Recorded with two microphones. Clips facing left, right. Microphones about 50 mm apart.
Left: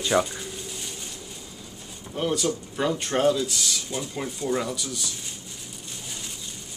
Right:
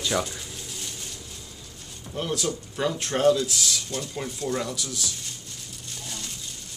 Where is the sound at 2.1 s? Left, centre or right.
Centre.